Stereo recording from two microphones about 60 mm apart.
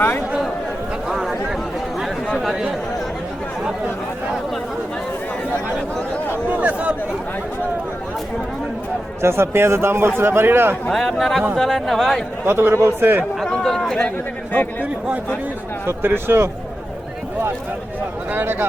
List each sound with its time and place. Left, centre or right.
1.0 s a sound: centre
2.4 s chatter: centre
6.6 s a sound: right
9.2 s speech: right
10.9 s speech: centre
12.5 s speech: right
13.5 s chatter: centre
14.5 s a man's voice: left
15.9 s speech: right
18.3 s speech: right